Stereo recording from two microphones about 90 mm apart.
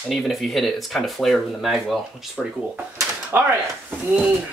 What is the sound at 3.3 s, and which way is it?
Speech, 25° right (ahead or behind).